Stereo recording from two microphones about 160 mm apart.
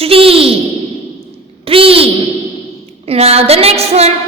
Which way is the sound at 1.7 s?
35° right (ahead or behind).